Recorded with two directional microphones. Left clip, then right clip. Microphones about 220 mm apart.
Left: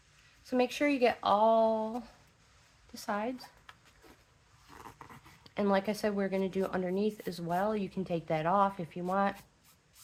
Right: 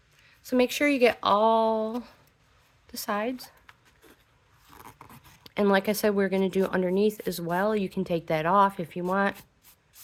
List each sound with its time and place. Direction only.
0.4 s speech: 45° right (ahead or behind)
4.9 s speech: 40° right (ahead or behind)